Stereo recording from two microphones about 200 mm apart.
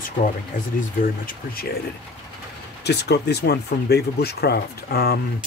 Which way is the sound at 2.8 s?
55° left (ahead or behind).